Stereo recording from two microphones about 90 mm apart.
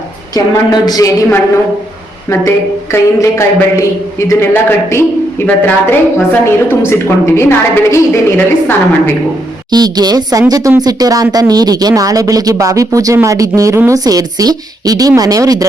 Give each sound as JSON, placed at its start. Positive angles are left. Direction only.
{"t": 0.3, "sound": "a woman's voice", "side_deg": 45}
{"t": 2.9, "sound": "a sound", "side_deg": 30}
{"t": 4.3, "sound": "a woman's voice", "side_deg": 30}
{"t": 9.6, "sound": "speech", "side_deg": -50}